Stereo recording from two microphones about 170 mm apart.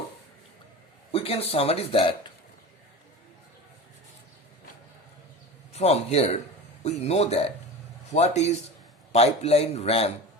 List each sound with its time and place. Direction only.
1.1 s speech: 35° left (ahead or behind)
5.7 s speech: 40° left (ahead or behind)